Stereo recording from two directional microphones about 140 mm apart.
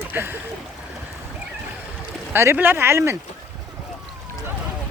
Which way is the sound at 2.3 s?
15° right (ahead or behind).